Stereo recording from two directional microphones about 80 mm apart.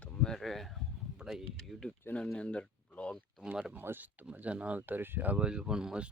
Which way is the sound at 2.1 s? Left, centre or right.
Centre.